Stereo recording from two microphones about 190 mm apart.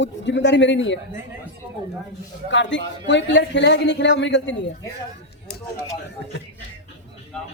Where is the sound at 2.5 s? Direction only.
70° left (ahead or behind).